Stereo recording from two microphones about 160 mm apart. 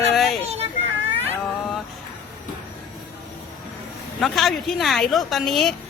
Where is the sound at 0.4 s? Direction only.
40° right (ahead or behind).